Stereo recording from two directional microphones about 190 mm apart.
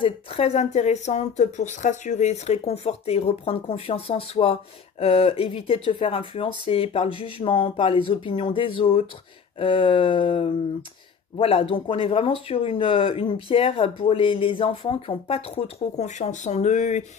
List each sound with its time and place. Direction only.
0.0 s speech: 30° left (ahead or behind)